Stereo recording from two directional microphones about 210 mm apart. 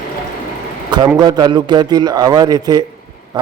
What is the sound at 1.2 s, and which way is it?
A man's voice, 20° right (ahead or behind).